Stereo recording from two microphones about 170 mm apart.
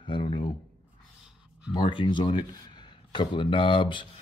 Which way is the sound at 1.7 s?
30° left (ahead or behind).